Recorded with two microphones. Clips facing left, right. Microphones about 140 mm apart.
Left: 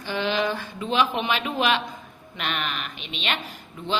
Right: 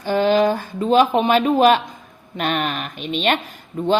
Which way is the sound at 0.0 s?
45° right (ahead or behind).